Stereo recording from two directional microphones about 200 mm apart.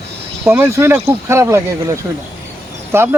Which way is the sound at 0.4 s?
10° right (ahead or behind).